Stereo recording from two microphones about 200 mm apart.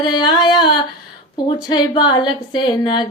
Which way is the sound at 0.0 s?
20° left (ahead or behind).